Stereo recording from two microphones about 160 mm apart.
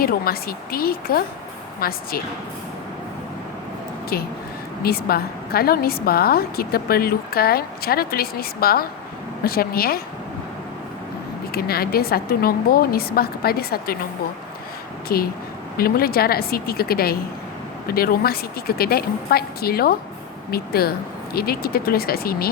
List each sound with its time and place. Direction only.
0.0 s a woman's voice: 70° left (ahead or behind)
4.1 s a woman's voice: 75° left (ahead or behind)
11.5 s a woman's voice: 70° left (ahead or behind)
15.1 s a woman's voice: 70° left (ahead or behind)